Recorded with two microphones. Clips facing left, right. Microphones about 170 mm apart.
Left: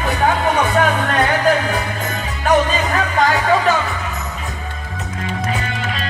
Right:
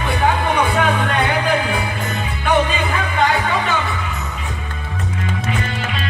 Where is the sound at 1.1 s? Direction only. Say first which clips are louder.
Left 2 dB; 40° left (ahead or behind).